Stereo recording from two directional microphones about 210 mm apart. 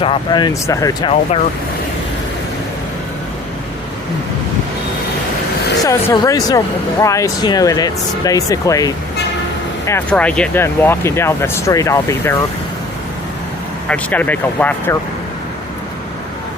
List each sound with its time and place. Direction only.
0.0 s speech: 25° left (ahead or behind)
5.8 s speech: 15° left (ahead or behind)
13.8 s speech: 5° left (ahead or behind)